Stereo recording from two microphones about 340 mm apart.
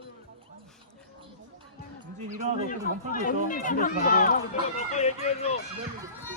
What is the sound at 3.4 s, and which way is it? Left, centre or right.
Run, left.